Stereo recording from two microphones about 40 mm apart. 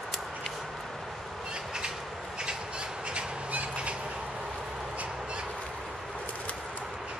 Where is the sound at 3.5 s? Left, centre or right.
Right.